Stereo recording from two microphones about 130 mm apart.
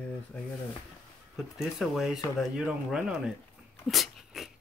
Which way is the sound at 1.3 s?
5° right (ahead or behind).